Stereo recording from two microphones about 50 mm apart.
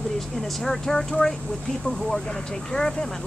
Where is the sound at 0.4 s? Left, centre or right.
Centre.